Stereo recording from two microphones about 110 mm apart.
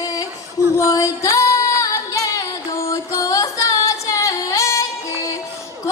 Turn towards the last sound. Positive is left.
turn(degrees=30)  # may be behind; listen again after turning